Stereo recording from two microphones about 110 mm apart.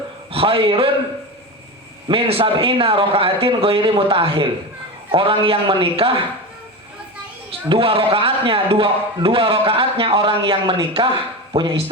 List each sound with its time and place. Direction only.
0.3 s a man's voice: 55° right (ahead or behind)
2.0 s a man's voice: 55° right (ahead or behind)
7.7 s a man's voice: 55° right (ahead or behind)